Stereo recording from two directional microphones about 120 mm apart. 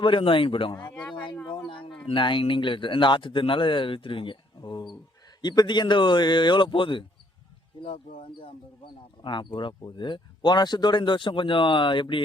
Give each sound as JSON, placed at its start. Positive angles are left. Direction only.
{"t": 0.0, "sound": "speech", "side_deg": 45}